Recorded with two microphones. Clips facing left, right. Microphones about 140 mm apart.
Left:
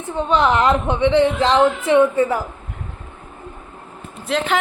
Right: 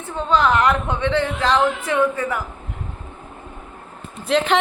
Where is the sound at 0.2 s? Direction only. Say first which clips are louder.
Left 1 dB; 20° left (ahead or behind).